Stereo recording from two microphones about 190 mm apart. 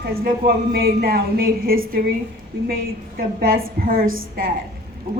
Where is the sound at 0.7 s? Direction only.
55° right (ahead or behind).